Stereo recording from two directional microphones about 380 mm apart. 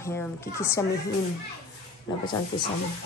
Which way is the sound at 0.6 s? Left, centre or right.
Centre.